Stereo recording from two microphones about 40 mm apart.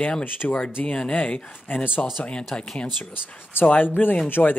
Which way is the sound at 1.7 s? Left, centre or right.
Left.